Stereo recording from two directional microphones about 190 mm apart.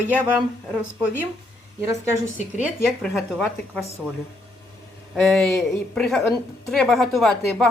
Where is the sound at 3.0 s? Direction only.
Centre (ahead or behind).